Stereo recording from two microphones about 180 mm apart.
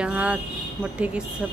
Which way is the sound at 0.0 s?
5° right (ahead or behind).